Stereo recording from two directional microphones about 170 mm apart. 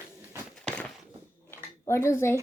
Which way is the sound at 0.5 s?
5° left (ahead or behind).